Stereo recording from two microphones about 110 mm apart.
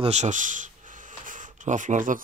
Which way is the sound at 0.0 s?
90° right.